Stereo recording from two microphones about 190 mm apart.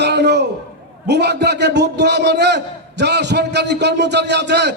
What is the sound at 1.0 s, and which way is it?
A man's voice, 65° right (ahead or behind).